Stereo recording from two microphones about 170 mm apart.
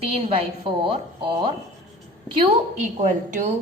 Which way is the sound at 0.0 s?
35° right (ahead or behind).